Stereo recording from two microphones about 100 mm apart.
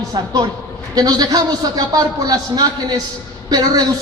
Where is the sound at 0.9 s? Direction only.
40° right (ahead or behind).